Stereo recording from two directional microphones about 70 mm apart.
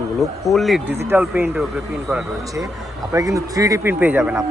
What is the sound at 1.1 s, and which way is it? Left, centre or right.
Speech, right.